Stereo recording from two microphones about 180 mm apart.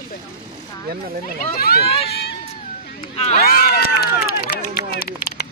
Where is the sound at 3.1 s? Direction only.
35° left (ahead or behind).